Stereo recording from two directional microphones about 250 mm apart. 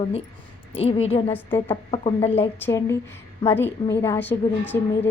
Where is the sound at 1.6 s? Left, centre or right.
Left.